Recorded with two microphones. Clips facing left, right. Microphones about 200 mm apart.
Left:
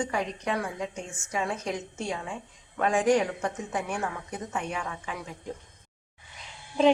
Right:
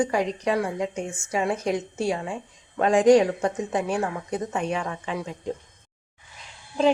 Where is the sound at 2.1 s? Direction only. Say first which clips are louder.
Right 6 dB; 30° right (ahead or behind).